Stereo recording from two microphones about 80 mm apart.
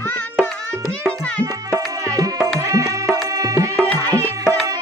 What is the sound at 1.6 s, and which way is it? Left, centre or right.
Music, right.